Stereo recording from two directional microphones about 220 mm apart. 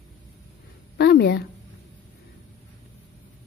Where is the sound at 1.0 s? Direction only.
50° left (ahead or behind).